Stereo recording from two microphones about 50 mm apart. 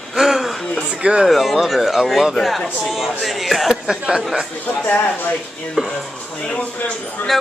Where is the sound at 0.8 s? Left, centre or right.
Right.